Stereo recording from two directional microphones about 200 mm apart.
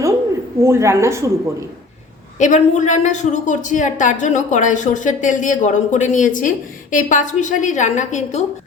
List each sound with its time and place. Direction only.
0.6 s speech: 15° right (ahead or behind)
2.4 s a woman's voice: 35° left (ahead or behind)